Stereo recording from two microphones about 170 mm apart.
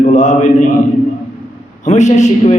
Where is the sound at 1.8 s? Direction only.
45° left (ahead or behind).